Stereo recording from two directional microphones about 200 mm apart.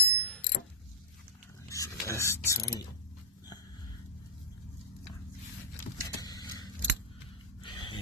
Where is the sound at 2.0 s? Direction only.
15° left (ahead or behind).